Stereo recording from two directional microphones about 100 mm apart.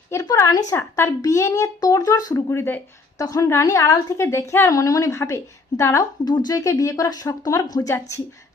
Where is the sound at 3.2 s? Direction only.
35° left (ahead or behind).